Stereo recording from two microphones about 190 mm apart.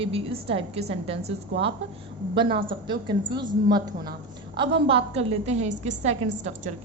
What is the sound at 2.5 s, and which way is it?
A woman's voice, 25° right (ahead or behind).